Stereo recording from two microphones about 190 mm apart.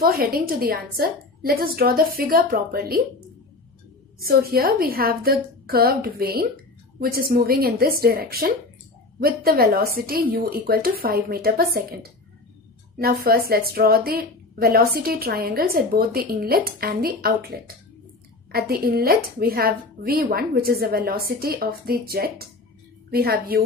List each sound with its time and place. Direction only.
0.0 s a woman's voice: 55° right (ahead or behind)
4.3 s a woman's voice: 50° right (ahead or behind)